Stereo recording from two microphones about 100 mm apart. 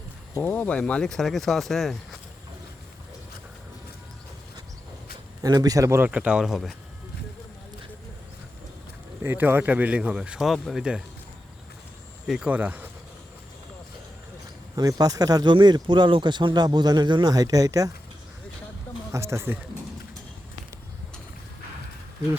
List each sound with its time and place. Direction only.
0.4 s speech: 15° left (ahead or behind)
5.4 s speech: 40° right (ahead or behind)
6.1 s speech: 10° right (ahead or behind)
9.2 s speech: 20° right (ahead or behind); by 11.0 s 5° right (ahead or behind)
12.5 s speech: 15° right (ahead or behind)
14.8 s speech: 40° right (ahead or behind)
19.1 s speech: 30° right (ahead or behind)